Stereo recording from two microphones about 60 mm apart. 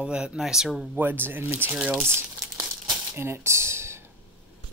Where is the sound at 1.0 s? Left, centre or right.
Right.